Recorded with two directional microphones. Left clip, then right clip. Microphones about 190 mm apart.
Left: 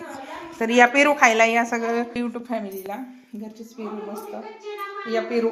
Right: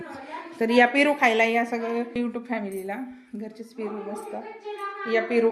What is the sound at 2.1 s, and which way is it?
A woman's voice, 10° right (ahead or behind).